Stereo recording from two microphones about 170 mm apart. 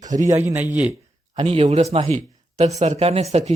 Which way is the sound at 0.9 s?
35° right (ahead or behind).